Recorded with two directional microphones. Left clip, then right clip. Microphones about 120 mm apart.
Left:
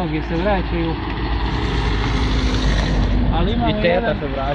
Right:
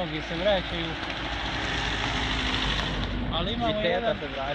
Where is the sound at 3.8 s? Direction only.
50° left (ahead or behind).